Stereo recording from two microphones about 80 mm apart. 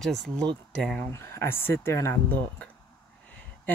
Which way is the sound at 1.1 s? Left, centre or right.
Left.